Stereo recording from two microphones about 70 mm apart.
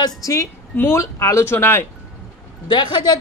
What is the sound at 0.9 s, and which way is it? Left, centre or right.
Speech, left.